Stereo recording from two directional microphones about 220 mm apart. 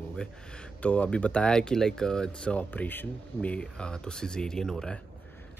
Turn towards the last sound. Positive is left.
turn(degrees=5)  # may be behind; listen again after turning